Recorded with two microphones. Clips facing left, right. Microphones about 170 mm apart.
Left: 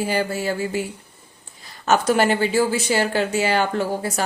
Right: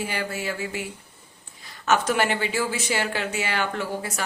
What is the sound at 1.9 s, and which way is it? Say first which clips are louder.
Speech: left 4 dB; 35° left (ahead or behind).